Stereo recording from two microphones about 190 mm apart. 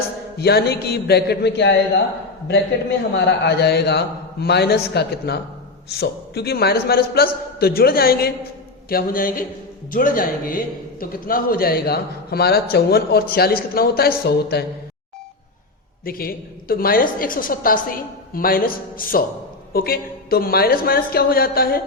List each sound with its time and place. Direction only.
0.3 s a man's voice: 60° left (ahead or behind)
3.2 s a man's voice: 65° left (ahead or behind)
16.0 s a woman's voice: 50° left (ahead or behind)